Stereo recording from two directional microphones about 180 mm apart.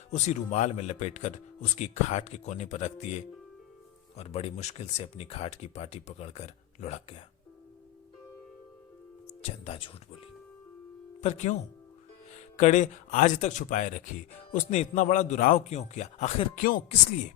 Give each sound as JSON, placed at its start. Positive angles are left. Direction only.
{"t": 0.3, "sound": "speech", "side_deg": 40}
{"t": 9.4, "sound": "speech", "side_deg": 35}
{"t": 11.2, "sound": "speech", "side_deg": 40}